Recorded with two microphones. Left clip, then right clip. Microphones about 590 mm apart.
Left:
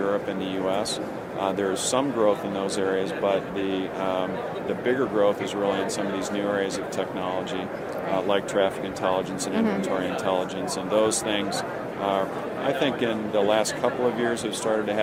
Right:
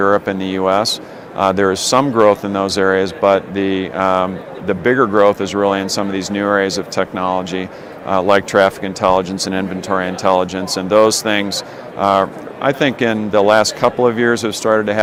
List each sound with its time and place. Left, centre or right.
0.0 s speech: right
12.6 s speech: right